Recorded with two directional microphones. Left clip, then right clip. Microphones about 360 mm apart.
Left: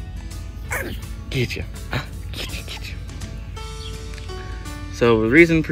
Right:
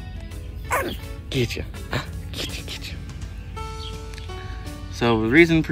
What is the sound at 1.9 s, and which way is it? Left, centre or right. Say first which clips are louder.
Music: even; centre.